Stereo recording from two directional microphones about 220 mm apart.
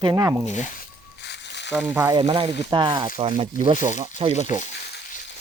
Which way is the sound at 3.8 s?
35° left (ahead or behind).